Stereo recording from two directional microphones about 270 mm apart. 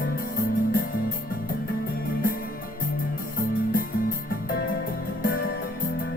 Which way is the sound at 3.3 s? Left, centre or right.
Left.